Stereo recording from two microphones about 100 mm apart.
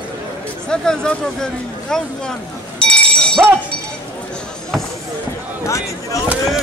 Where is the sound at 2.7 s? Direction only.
10° left (ahead or behind).